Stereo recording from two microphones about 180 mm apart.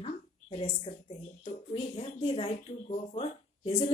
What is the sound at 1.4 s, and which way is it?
Speech, 30° left (ahead or behind).